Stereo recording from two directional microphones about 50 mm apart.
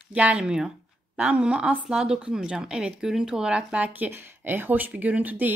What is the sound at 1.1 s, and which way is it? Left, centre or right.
A woman's voice, right.